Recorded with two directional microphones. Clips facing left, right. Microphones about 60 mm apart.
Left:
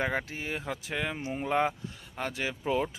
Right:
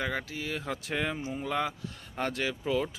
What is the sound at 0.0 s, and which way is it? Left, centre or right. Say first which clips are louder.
Speech: left 2 dB; left.